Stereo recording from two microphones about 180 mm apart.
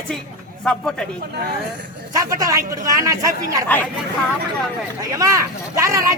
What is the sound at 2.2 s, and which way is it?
Speech, 20° right (ahead or behind).